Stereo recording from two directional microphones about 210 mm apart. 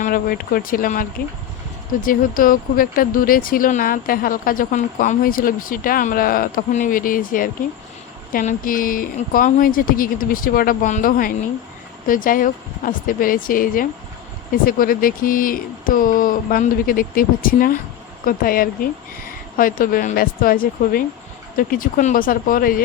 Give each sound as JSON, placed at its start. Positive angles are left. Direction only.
{"t": 0.0, "sound": "speech", "side_deg": 45}
{"t": 2.0, "sound": "speech", "side_deg": 40}